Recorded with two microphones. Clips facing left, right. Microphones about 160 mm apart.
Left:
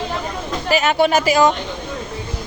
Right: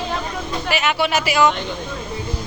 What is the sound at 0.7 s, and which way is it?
Speech, 40° left (ahead or behind).